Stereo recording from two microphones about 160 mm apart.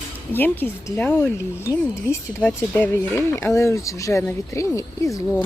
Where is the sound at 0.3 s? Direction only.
10° left (ahead or behind).